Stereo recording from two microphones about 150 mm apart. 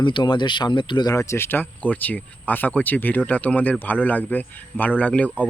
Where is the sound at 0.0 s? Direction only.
30° left (ahead or behind).